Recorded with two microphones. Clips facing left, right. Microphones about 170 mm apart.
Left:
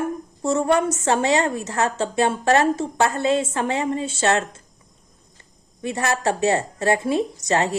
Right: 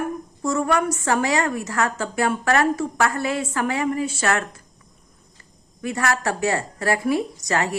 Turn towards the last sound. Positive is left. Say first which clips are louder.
# left 2 dB
turn(degrees=25)  # may be behind; listen again after turning